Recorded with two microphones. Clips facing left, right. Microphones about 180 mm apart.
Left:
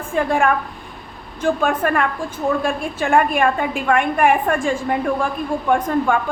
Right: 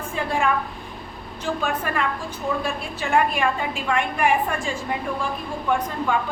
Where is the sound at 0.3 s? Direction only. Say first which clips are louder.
Left 1 dB; 50° left (ahead or behind).